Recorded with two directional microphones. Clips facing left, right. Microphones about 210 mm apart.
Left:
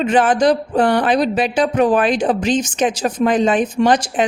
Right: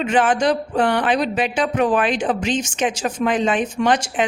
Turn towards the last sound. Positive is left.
turn(degrees=35)  # may be behind; listen again after turning